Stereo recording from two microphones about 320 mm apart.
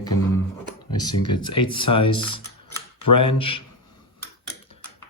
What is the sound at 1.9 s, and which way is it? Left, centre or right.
Speech, left.